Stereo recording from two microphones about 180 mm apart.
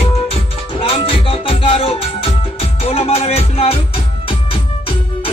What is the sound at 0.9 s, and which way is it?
Music, 30° left (ahead or behind).